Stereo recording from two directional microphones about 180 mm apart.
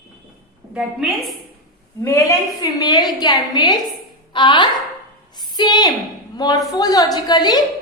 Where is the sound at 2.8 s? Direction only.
20° left (ahead or behind).